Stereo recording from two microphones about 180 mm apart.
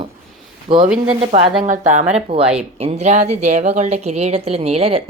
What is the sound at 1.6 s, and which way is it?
Speech, 45° right (ahead or behind).